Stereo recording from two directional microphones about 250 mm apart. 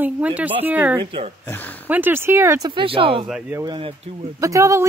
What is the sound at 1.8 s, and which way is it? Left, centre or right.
Speech, centre.